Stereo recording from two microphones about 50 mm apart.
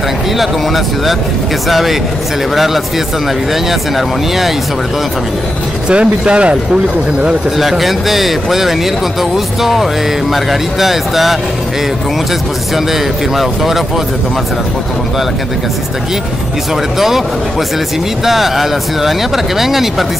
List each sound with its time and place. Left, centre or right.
0.4 s a man's voice: centre
5.9 s speech: right
7.5 s a man's voice: centre
13.4 s a man's voice: centre
18.2 s a man's voice: centre